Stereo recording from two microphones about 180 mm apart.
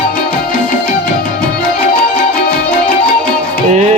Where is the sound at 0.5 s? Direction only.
50° left (ahead or behind).